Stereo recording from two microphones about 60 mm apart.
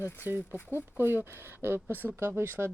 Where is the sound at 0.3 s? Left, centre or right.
Right.